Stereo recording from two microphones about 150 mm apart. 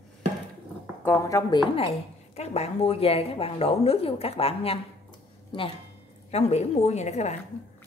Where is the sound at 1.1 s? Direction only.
20° left (ahead or behind).